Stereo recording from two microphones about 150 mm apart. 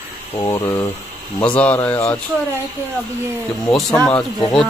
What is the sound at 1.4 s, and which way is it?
Speech, 10° left (ahead or behind).